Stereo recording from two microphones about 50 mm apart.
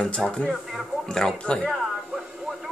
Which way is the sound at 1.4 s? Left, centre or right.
Left.